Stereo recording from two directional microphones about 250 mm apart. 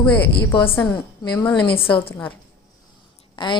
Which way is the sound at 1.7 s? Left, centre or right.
Left.